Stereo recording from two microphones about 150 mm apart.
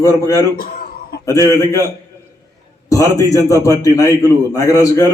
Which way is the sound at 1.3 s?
20° left (ahead or behind).